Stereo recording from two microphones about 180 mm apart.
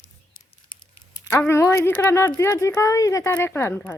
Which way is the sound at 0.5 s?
30° left (ahead or behind).